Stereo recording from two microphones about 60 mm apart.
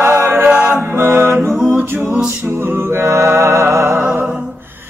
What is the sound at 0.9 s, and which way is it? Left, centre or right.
Music, right.